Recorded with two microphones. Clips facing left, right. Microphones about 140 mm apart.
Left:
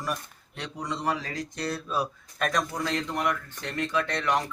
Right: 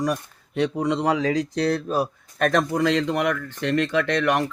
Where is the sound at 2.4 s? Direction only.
60° right (ahead or behind).